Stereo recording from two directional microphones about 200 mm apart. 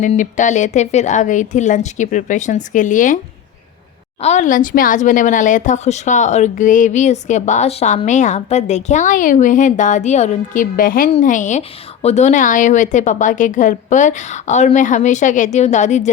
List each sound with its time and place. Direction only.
0.0 s a woman's voice: 40° left (ahead or behind)
4.2 s a woman's voice: 35° left (ahead or behind)